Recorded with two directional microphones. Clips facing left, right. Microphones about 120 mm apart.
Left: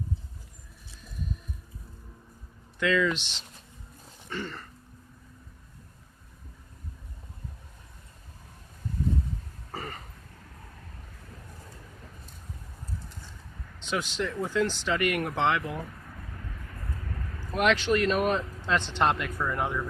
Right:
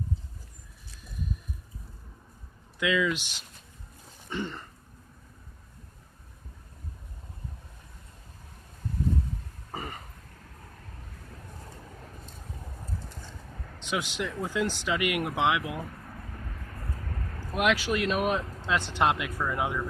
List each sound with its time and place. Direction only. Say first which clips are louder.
2.7 s speech: left 1 dB; 10° right (ahead or behind)
9.7 s throat clearing: even; 15° right (ahead or behind)
13.7 s speech: left 1 dB; 15° right (ahead or behind)
17.5 s speech: left 2 dB; 5° right (ahead or behind)